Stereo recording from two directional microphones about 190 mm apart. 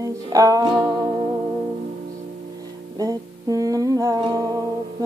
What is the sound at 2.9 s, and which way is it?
Music, 20° right (ahead or behind).